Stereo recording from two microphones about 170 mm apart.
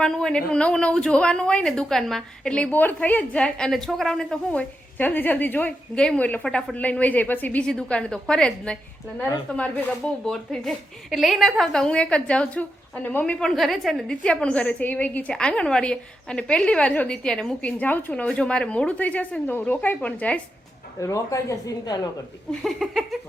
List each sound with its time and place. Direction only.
0.0 s speech: 5° left (ahead or behind)
21.0 s speech: 20° left (ahead or behind)
22.6 s speech: centre (ahead or behind)